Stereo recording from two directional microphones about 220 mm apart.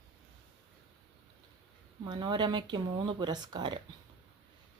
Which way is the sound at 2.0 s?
20° right (ahead or behind).